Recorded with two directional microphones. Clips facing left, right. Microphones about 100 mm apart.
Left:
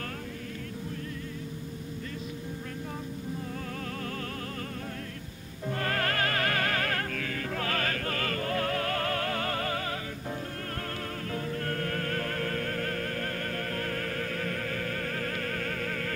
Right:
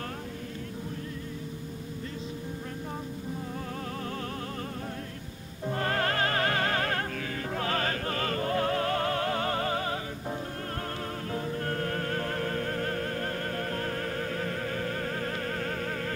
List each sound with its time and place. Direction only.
5.7 s music: 25° right (ahead or behind)
11.3 s music: 25° right (ahead or behind)